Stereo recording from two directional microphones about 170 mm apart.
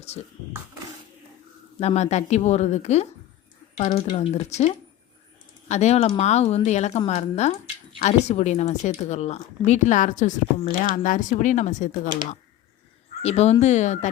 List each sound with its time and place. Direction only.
0.0 s speech: 40° left (ahead or behind)
1.8 s a woman's voice: 40° left (ahead or behind)
13.2 s a woman's voice: 40° left (ahead or behind)